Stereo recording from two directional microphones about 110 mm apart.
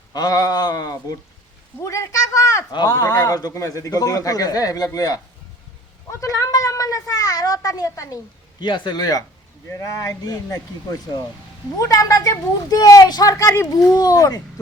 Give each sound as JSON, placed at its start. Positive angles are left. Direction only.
{"t": 0.1, "sound": "a man's voice", "side_deg": 35}
{"t": 8.6, "sound": "a man's voice", "side_deg": 45}
{"t": 13.7, "sound": "a man's voice", "side_deg": 35}